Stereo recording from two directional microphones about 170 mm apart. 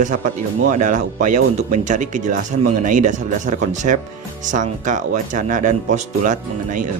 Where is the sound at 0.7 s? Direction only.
45° right (ahead or behind).